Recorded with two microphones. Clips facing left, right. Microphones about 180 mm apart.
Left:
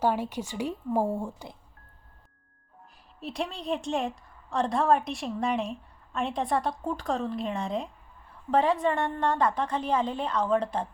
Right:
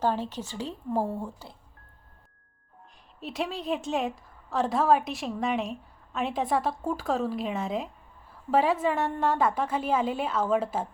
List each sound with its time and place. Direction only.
0.0 s a woman's voice: 10° left (ahead or behind)
3.2 s a woman's voice: centre (ahead or behind)